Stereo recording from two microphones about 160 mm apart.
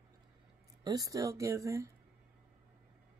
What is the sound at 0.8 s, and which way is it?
Speech, 25° right (ahead or behind).